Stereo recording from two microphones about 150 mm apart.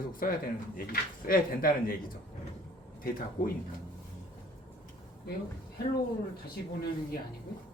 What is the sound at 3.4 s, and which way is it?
Speech, 70° left (ahead or behind).